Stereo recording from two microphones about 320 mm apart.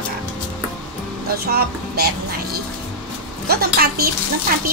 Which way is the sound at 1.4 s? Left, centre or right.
Right.